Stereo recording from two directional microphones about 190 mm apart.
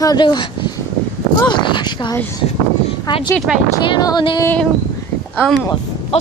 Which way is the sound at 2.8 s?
25° left (ahead or behind).